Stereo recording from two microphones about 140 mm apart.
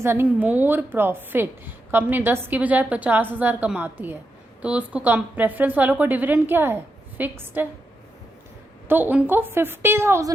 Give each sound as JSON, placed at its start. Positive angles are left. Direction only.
{"t": 0.0, "sound": "a woman's voice", "side_deg": -15}
{"t": 8.9, "sound": "a woman's voice", "side_deg": -15}